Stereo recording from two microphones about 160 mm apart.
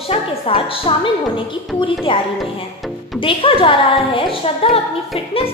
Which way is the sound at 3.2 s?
35° left (ahead or behind).